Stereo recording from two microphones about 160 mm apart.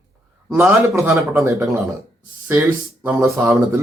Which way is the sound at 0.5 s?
20° right (ahead or behind).